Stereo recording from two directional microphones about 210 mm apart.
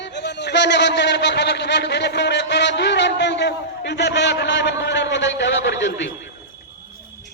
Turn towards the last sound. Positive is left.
turn(degrees=60)  # may be behind; listen again after turning